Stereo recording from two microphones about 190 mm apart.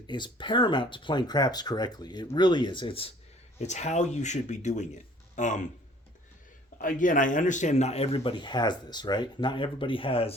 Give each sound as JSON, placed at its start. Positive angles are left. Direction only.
{"t": 0.1, "sound": "speech", "side_deg": 25}
{"t": 6.8, "sound": "speech", "side_deg": 45}